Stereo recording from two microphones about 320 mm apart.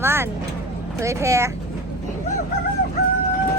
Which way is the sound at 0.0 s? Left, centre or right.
Centre.